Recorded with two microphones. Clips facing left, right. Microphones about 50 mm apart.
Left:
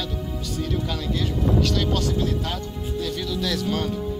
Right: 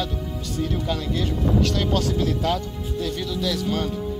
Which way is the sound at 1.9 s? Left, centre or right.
Right.